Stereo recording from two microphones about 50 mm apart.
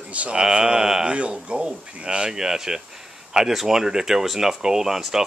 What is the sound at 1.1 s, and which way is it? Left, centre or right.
Speech, right.